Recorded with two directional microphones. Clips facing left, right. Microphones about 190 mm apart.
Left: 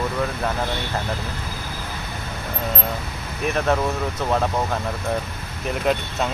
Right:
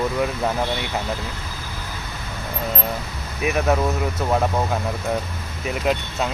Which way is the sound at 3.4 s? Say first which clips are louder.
Right 1 dB; 5° right (ahead or behind).